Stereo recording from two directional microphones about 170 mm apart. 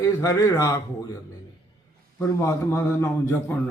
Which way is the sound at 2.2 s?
20° left (ahead or behind).